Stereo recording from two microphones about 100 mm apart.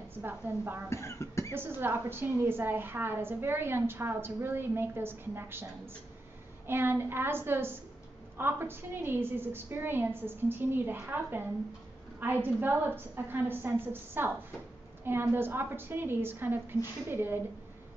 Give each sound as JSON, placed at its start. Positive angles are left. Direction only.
{"t": 0.1, "sound": "a woman's voice", "side_deg": -20}
{"t": 0.8, "sound": "speech", "side_deg": 30}
{"t": 1.5, "sound": "a woman's voice", "side_deg": -20}
{"t": 6.7, "sound": "a woman's voice", "side_deg": -20}